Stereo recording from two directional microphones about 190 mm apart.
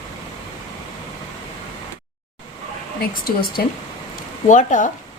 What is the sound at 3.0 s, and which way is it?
Speech, 50° left (ahead or behind).